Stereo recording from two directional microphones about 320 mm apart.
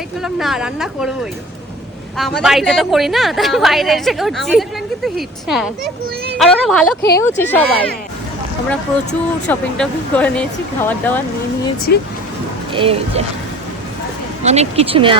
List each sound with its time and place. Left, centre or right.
0.2 s a woman's voice: centre
9.5 s a woman's voice: centre
11.9 s speech: left
12.7 s speech: centre
14.4 s speech: centre